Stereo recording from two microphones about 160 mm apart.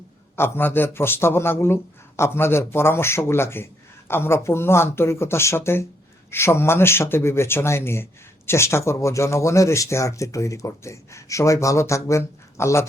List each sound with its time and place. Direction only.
0.3 s a man's voice: 15° left (ahead or behind)